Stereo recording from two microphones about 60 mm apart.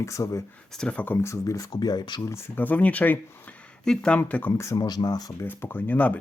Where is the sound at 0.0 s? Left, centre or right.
Left.